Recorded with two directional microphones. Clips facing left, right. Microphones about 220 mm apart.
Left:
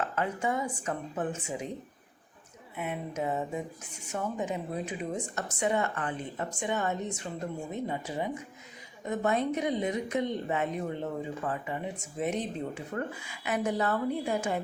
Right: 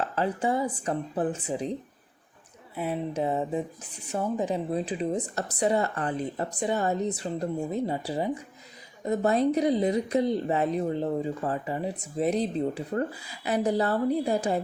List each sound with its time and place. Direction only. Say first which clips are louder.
0.2 s speech: right 5 dB; 35° right (ahead or behind)
2.7 s speech: right 5 dB; 35° right (ahead or behind)